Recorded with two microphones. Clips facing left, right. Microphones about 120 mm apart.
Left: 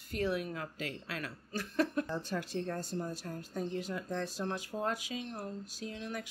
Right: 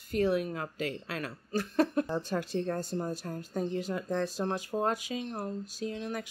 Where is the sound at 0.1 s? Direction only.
35° right (ahead or behind).